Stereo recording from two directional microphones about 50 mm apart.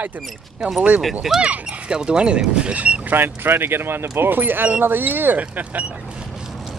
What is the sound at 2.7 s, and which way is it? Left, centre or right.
Boat, right.